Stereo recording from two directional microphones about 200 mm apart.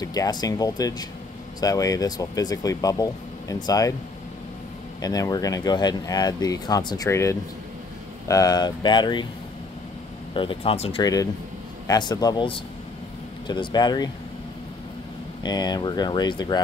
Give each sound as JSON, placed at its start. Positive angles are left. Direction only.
{"t": 0.0, "sound": "speech", "side_deg": 20}
{"t": 5.0, "sound": "speech", "side_deg": 20}
{"t": 10.3, "sound": "speech", "side_deg": 25}
{"t": 15.4, "sound": "speech", "side_deg": 20}